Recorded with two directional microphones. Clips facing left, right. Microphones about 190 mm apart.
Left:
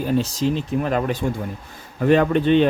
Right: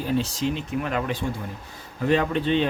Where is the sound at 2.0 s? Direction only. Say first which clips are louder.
Left 6 dB; 55° left (ahead or behind).